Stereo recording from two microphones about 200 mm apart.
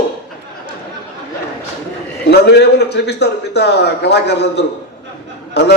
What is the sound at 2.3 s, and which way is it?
A man's voice, 55° left (ahead or behind).